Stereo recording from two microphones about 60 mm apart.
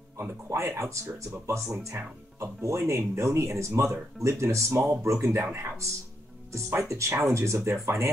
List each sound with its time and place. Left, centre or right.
0.2 s speech: right